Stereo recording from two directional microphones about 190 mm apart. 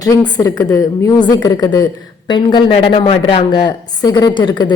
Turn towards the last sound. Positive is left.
turn(degrees=25)  # may be behind; listen again after turning